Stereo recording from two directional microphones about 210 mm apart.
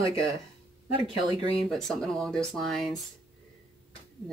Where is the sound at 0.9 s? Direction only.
20° right (ahead or behind).